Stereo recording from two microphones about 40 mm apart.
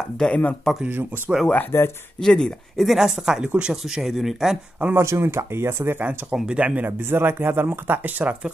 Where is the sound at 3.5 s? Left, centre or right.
Right.